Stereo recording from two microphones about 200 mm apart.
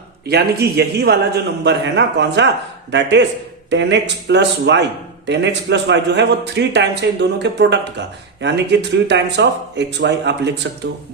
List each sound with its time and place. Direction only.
0.3 s a man's voice: 55° right (ahead or behind)